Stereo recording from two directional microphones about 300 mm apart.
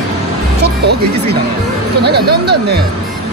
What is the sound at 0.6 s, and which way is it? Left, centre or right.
Speech, right.